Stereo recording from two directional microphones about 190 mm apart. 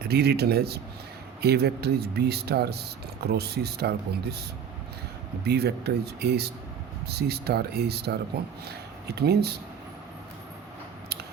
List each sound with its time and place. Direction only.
0.1 s speech: 55° right (ahead or behind)
5.5 s speech: 60° right (ahead or behind)